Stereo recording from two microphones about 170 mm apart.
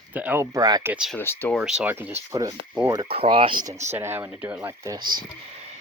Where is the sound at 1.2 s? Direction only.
10° left (ahead or behind).